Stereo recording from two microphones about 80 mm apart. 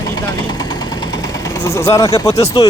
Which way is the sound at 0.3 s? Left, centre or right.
Left.